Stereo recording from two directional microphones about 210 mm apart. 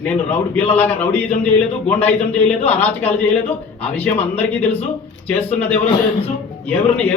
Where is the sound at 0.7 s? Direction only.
10° left (ahead or behind).